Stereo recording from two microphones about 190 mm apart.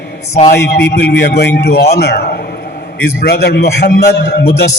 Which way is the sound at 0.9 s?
55° left (ahead or behind).